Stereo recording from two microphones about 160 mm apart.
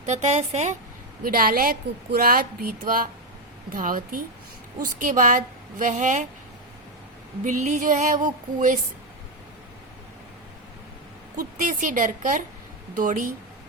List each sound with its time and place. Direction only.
0.0 s music: 45° right (ahead or behind)
1.2 s a woman's voice: 65° right (ahead or behind)
5.8 s music: 50° right (ahead or behind)
7.4 s music: 50° right (ahead or behind)
11.3 s music: 55° right (ahead or behind)
13.0 s a woman's voice: 55° right (ahead or behind)